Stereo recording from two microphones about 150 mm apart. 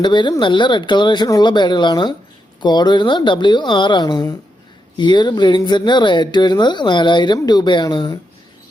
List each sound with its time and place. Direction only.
0.0 s speech: 30° left (ahead or behind)